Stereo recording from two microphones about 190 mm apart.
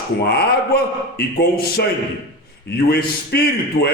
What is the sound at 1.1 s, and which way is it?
A man's voice, 55° left (ahead or behind).